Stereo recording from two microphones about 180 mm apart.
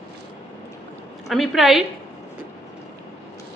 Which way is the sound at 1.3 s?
Centre (ahead or behind).